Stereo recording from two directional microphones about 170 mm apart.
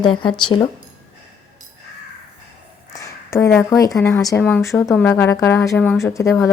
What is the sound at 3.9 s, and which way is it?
Speech, 15° left (ahead or behind).